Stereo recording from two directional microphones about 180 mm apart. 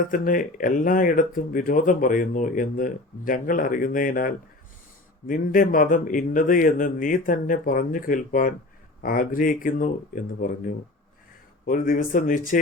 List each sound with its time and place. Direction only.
0.0 s speech: 50° left (ahead or behind)